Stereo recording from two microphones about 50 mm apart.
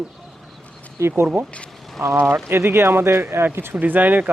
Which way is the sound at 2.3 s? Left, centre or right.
Right.